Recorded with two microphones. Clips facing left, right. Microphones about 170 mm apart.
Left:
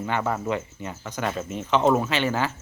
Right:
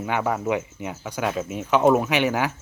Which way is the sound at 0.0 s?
10° right (ahead or behind).